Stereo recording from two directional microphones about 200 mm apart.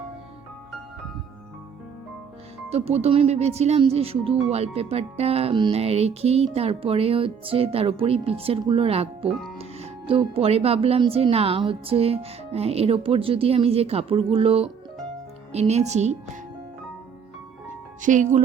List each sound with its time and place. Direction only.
2.6 s speech: 30° right (ahead or behind)
18.0 s speech: 40° right (ahead or behind)